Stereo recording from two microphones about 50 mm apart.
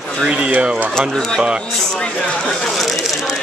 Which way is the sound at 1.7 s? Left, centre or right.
Centre.